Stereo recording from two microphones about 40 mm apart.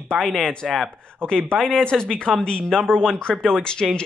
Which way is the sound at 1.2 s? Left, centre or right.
Left.